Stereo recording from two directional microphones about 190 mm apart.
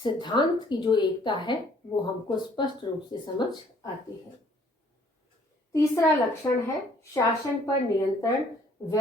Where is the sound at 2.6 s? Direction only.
25° left (ahead or behind).